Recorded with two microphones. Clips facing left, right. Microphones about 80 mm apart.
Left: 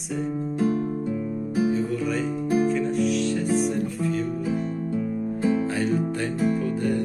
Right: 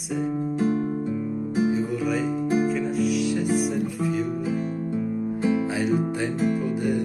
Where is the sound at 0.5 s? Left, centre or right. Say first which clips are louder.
Left 1 dB; right.